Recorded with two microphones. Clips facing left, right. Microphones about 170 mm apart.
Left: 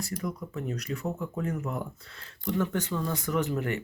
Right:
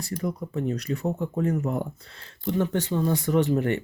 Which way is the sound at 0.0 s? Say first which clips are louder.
Right 4 dB; 35° right (ahead or behind).